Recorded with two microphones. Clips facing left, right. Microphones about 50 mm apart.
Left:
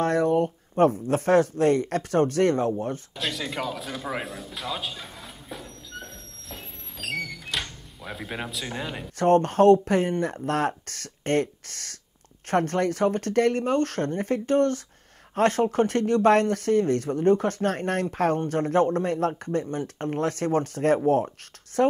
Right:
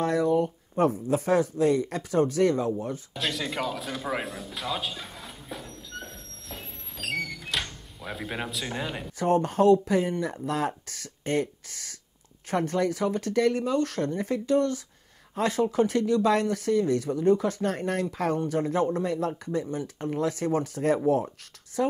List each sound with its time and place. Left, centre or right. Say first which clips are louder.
0.0 s speech: left 2 dB; left
3.2 s a sound: right 2 dB; centre
9.2 s speech: left 4 dB; left